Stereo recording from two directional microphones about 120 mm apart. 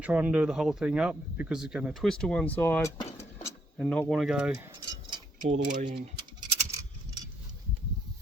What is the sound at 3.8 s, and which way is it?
Speech, 5° left (ahead or behind).